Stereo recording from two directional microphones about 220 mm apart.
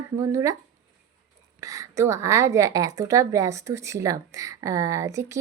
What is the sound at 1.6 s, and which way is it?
A woman's voice, 15° right (ahead or behind).